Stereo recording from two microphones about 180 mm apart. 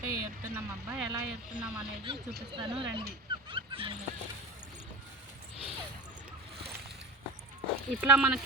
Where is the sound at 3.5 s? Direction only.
30° right (ahead or behind).